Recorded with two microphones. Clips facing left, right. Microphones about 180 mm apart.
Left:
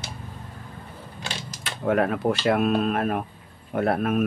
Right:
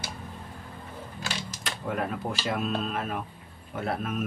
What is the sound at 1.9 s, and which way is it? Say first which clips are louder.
Speech: left 9 dB; 70° left (ahead or behind).